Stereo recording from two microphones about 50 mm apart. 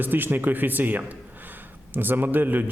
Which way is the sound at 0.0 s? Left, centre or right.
Right.